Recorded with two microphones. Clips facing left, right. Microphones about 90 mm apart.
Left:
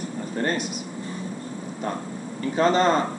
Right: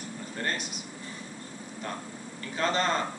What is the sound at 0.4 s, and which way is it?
Air conditioning, 25° left (ahead or behind).